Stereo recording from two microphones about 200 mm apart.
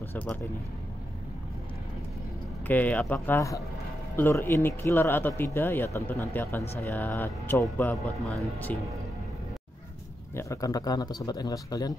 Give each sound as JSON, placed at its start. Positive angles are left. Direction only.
{"t": 0.1, "sound": "speech", "side_deg": 10}
{"t": 2.6, "sound": "speech", "side_deg": 10}
{"t": 10.3, "sound": "a man's voice", "side_deg": 15}